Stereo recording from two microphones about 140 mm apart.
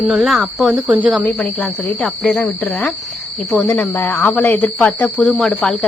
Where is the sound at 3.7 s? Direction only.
15° left (ahead or behind).